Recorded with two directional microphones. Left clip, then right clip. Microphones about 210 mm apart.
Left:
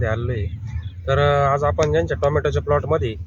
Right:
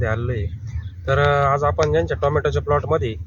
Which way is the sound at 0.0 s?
5° left (ahead or behind).